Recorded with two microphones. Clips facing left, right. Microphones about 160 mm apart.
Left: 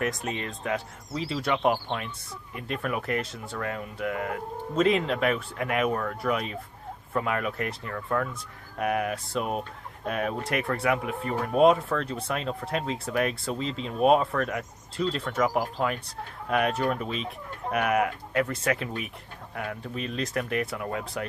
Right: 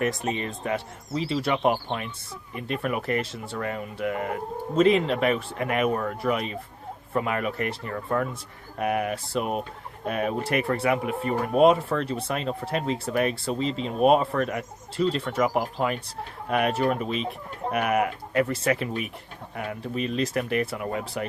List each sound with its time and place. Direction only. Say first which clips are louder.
0.0 s speech: right 3 dB; 5° right (ahead or behind)